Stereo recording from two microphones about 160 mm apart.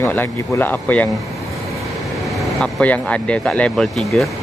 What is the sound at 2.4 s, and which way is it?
Speech, 5° left (ahead or behind).